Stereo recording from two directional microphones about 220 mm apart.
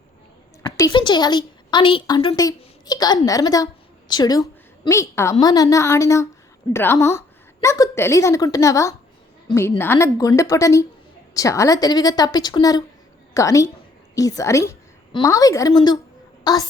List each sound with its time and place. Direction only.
0.6 s a woman's voice: 20° left (ahead or behind)